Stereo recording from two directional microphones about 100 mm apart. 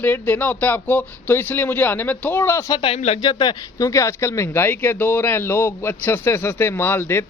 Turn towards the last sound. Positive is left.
turn(degrees=25)  # may be behind; listen again after turning